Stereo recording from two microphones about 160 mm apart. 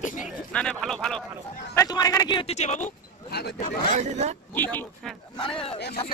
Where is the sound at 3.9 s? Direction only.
45° right (ahead or behind).